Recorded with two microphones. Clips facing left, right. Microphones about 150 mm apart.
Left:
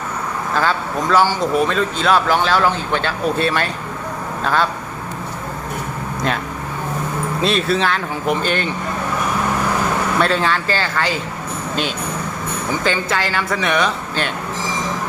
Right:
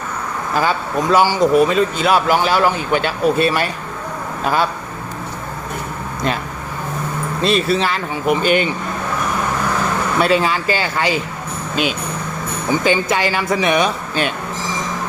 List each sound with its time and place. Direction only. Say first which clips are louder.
0.5 s speech: right 2 dB; 10° right (ahead or behind)
7.4 s speech: right 2 dB; 5° right (ahead or behind)
10.2 s speech: right 4 dB; 10° right (ahead or behind)
12.8 s speech: right 3 dB; 15° right (ahead or behind)